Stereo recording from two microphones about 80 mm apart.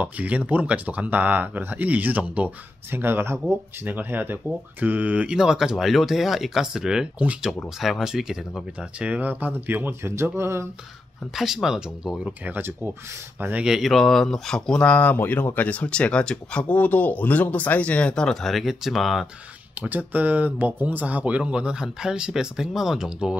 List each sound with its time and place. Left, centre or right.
0.0 s speech: centre
11.3 s speech: centre
12.4 s speech: right
13.7 s speech: centre
19.8 s speech: right